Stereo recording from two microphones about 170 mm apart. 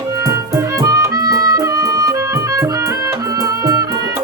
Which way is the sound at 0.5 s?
20° right (ahead or behind).